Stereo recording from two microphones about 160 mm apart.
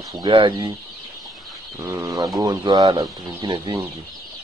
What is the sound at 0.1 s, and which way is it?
Speech, 30° right (ahead or behind).